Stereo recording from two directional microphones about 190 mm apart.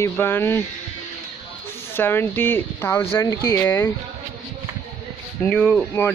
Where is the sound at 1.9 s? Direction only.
10° left (ahead or behind).